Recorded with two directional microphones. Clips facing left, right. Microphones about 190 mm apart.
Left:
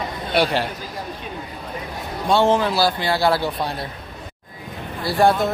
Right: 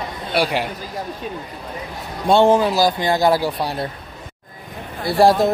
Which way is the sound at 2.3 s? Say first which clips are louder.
Right 4 dB; 15° right (ahead or behind).